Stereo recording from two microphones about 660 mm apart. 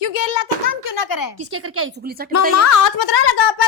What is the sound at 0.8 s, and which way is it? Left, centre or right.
Speech, left.